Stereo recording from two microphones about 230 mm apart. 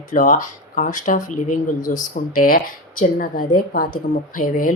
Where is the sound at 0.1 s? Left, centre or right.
Left.